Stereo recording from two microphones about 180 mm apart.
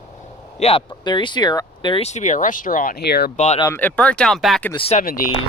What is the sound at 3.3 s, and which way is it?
Speech, 40° left (ahead or behind).